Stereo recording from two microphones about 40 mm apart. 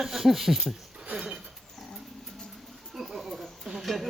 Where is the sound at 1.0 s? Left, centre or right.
Right.